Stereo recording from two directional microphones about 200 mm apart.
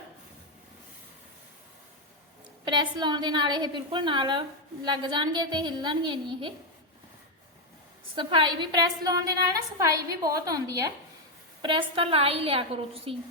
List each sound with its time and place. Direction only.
2.6 s a woman's voice: 20° right (ahead or behind)
8.1 s a woman's voice: 25° right (ahead or behind)